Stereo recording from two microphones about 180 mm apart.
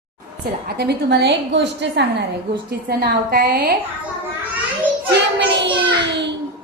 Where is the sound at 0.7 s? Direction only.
65° right (ahead or behind).